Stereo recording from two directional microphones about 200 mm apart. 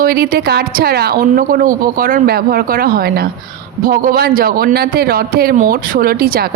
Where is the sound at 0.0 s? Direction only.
50° right (ahead or behind).